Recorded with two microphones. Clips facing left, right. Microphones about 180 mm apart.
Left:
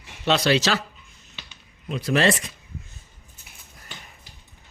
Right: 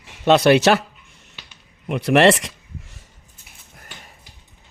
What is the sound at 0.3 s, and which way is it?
Speech, 55° right (ahead or behind).